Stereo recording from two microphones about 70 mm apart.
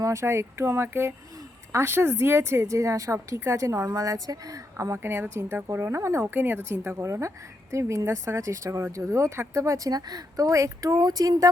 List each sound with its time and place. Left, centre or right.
0.0 s a woman's voice: right
6.2 s a woman's voice: right
11.0 s speech: right